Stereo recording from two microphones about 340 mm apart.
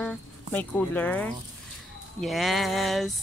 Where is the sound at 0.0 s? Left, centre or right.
Centre.